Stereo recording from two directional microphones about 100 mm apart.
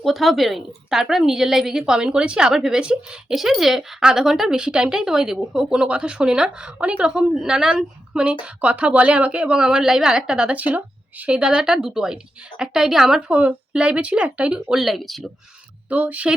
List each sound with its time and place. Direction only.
0.0 s a woman's voice: centre (ahead or behind)
15.9 s a woman's voice: 15° right (ahead or behind)